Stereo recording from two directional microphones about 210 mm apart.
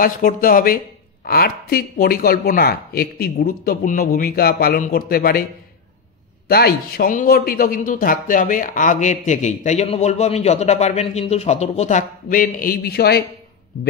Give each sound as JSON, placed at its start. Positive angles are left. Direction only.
{"t": 0.0, "sound": "speech", "side_deg": 40}
{"t": 6.5, "sound": "speech", "side_deg": 45}